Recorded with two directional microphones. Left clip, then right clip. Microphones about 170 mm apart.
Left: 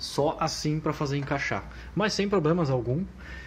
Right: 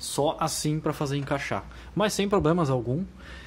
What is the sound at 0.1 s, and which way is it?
Speech, 20° right (ahead or behind).